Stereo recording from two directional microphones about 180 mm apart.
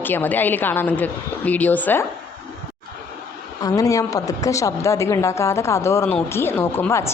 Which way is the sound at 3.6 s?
20° left (ahead or behind).